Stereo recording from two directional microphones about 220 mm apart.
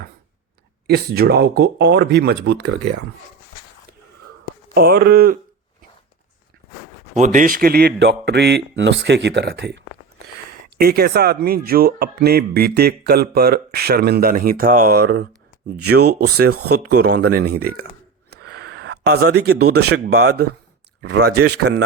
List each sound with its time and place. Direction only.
0.9 s speech: 45° right (ahead or behind)
4.7 s speech: 45° right (ahead or behind)
7.2 s speech: 35° right (ahead or behind)